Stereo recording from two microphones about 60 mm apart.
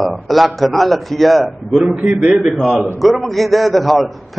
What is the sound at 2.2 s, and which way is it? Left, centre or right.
A man's voice, centre.